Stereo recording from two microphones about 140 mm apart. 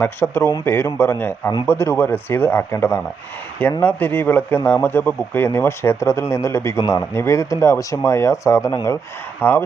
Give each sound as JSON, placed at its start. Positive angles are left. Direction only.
{"t": 0.0, "sound": "speech", "side_deg": 15}